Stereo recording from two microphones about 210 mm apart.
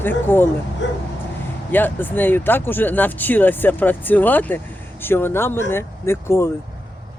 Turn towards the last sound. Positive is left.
turn(degrees=10)  # may be behind; listen again after turning